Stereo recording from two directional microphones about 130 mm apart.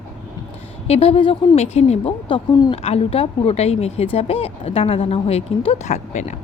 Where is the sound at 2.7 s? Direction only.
50° left (ahead or behind).